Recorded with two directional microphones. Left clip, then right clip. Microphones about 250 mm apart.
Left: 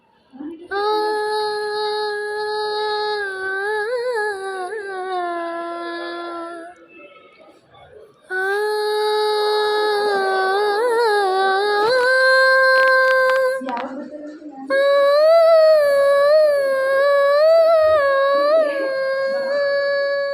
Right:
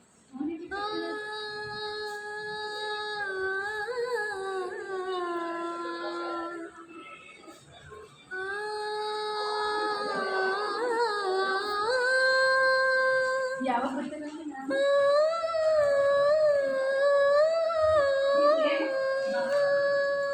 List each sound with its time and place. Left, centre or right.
0.7 s child singing: left
8.4 s a sound: left
14.7 s humming: left